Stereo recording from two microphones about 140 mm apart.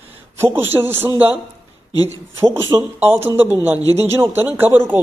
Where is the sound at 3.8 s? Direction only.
50° right (ahead or behind).